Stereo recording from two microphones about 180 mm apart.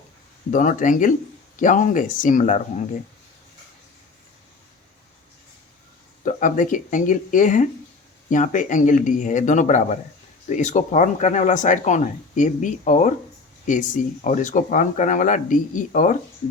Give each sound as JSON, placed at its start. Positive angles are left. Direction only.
{"t": 0.5, "sound": "speech", "side_deg": 45}
{"t": 6.2, "sound": "speech", "side_deg": 45}